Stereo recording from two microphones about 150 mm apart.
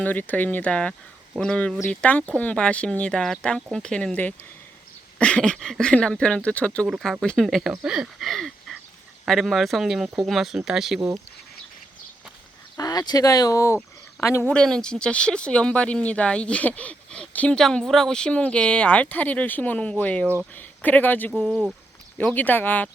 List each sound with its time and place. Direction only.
0.0 s speech: 10° left (ahead or behind)
12.7 s speech: 25° left (ahead or behind)
14.5 s speech: 5° left (ahead or behind)
21.5 s speech: 5° right (ahead or behind)
22.2 s speech: 10° left (ahead or behind)